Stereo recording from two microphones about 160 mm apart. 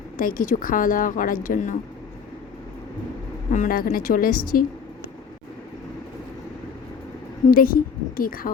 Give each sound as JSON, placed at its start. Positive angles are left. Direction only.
{"t": 0.2, "sound": "a woman's voice", "side_deg": 60}
{"t": 3.5, "sound": "a woman's voice", "side_deg": 60}
{"t": 7.5, "sound": "a woman's voice", "side_deg": 65}